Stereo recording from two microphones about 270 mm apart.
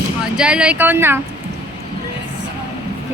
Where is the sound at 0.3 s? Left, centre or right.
Centre.